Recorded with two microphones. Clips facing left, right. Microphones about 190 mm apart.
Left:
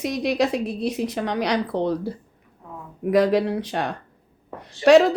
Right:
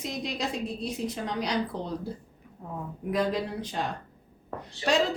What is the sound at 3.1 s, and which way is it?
A woman's voice, 70° left (ahead or behind).